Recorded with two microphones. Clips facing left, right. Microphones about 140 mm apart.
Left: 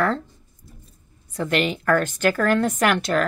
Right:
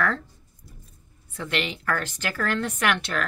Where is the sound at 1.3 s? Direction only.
40° left (ahead or behind).